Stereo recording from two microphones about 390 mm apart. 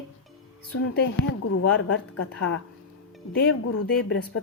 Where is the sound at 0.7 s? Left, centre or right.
Left.